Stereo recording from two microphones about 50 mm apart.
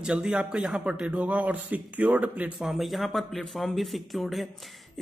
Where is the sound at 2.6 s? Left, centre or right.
Centre.